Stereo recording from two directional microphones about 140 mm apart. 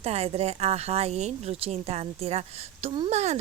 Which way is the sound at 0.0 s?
50° right (ahead or behind).